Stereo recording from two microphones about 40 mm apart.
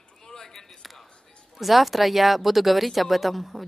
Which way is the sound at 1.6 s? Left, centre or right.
Centre.